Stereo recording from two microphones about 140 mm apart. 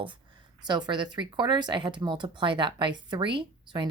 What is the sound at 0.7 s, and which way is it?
Speech, 30° right (ahead or behind).